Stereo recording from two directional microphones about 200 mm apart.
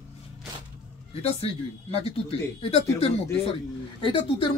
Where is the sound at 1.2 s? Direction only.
30° left (ahead or behind).